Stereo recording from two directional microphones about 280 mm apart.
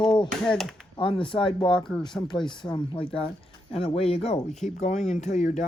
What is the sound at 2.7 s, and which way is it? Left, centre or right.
Speech, centre.